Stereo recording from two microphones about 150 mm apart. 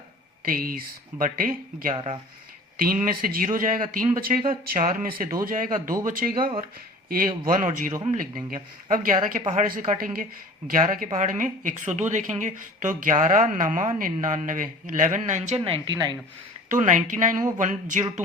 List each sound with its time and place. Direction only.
0.4 s speech: 70° right (ahead or behind); by 16.0 s 35° right (ahead or behind)
16.6 s speech: 60° right (ahead or behind)